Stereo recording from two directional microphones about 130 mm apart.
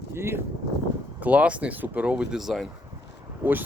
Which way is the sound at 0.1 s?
20° right (ahead or behind).